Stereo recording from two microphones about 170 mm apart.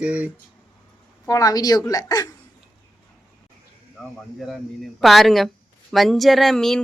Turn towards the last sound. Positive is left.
turn(degrees=0)  # may be behind; listen again after turning